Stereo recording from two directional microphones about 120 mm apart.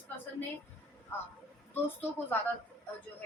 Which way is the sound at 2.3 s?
15° left (ahead or behind).